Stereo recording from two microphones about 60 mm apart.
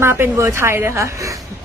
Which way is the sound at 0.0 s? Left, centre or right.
Right.